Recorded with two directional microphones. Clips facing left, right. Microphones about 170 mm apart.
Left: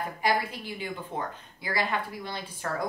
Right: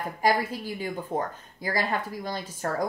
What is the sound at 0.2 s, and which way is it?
Speech, 40° right (ahead or behind).